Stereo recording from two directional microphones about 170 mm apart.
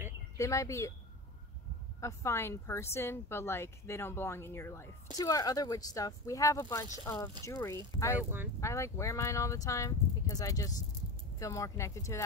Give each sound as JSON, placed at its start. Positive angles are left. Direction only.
{"t": 0.4, "sound": "speech", "side_deg": 15}
{"t": 2.0, "sound": "speech", "side_deg": 20}
{"t": 8.2, "sound": "speech", "side_deg": -10}
{"t": 8.5, "sound": "speech", "side_deg": 15}